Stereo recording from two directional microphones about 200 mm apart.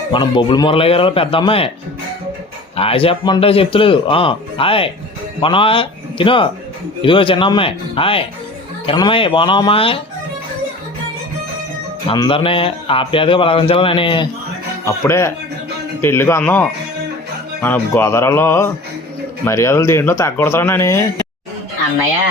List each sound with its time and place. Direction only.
0.1 s a man's voice: 25° left (ahead or behind)
2.7 s a man's voice: 30° left (ahead or behind)
12.0 s a man's voice: 25° left (ahead or behind)
14.8 s speech: 15° left (ahead or behind)